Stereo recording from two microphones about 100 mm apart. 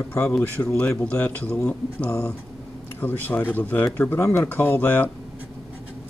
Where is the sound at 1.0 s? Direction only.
15° left (ahead or behind).